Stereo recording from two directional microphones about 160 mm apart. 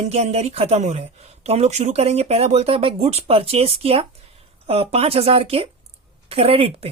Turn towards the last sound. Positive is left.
turn(degrees=-35)  # may be behind; listen again after turning